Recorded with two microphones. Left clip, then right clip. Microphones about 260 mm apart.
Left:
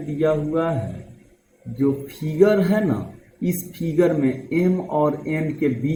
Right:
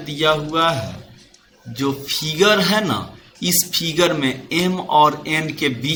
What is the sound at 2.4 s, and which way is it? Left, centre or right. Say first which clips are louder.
A man's voice: right 2 dB; right.